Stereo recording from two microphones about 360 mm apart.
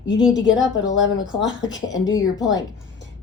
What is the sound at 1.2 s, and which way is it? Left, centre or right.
Speech, left.